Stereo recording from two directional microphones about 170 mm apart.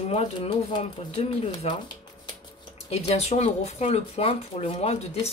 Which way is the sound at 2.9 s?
40° left (ahead or behind).